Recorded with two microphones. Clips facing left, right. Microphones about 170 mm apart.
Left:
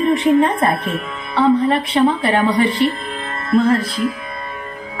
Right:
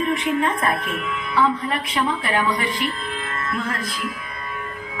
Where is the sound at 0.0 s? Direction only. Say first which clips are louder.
Left 8 dB; 35° left (ahead or behind).